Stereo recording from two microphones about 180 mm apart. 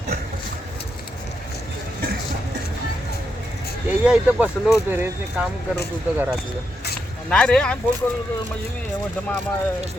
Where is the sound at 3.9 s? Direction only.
5° right (ahead or behind).